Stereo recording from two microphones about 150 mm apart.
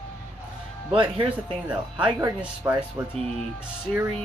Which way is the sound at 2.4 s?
10° right (ahead or behind).